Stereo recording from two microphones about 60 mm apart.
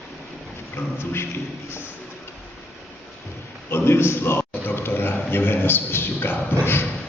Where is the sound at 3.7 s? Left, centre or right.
Left.